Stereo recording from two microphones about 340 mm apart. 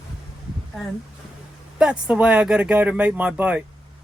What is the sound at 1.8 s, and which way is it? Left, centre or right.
Speech, centre.